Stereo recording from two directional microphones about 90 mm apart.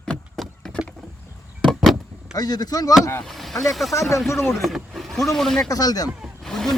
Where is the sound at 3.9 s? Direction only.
35° left (ahead or behind).